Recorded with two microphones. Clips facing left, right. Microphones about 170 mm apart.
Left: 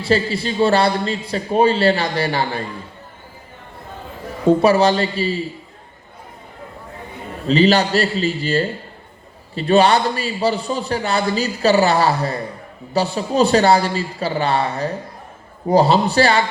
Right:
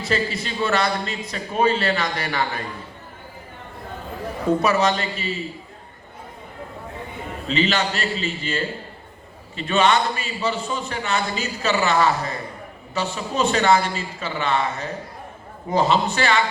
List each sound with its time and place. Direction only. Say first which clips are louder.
0.0 s a man's voice: left 6 dB; 30° left (ahead or behind)
4.4 s a man's voice: left 6 dB; 30° left (ahead or behind)
7.4 s a man's voice: left 8 dB; 35° left (ahead or behind)